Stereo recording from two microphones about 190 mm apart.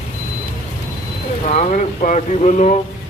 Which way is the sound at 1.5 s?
35° left (ahead or behind).